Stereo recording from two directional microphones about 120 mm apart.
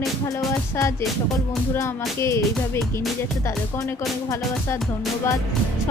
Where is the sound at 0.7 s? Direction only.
25° left (ahead or behind).